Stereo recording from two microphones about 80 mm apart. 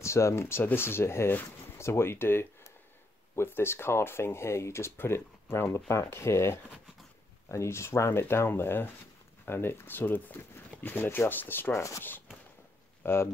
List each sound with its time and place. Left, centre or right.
0.0 s speech: left
11.7 s speech: left
13.0 s speech: left